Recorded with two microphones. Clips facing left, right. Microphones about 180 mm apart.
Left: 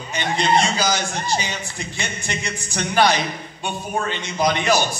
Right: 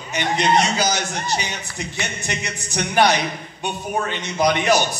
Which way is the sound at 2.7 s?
20° right (ahead or behind).